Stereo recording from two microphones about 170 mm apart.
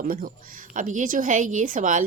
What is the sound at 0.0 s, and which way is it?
A woman's voice, 55° right (ahead or behind).